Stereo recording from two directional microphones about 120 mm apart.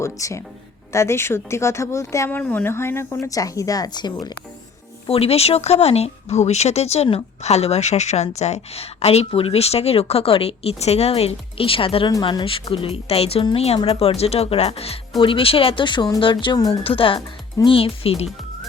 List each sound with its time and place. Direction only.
0.0 s speech: 25° left (ahead or behind)
5.0 s speech: 55° left (ahead or behind); by 16.7 s 35° left (ahead or behind)
16.8 s speech: 50° left (ahead or behind)